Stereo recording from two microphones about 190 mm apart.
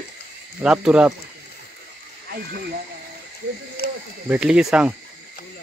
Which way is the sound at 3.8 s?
55° left (ahead or behind).